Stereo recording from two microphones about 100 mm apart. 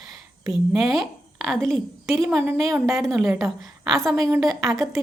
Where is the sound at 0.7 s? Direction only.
Centre (ahead or behind).